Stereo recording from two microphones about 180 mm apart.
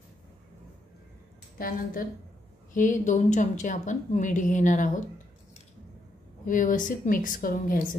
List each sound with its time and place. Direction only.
1.6 s a woman's voice: 55° left (ahead or behind)
6.4 s a woman's voice: 45° left (ahead or behind)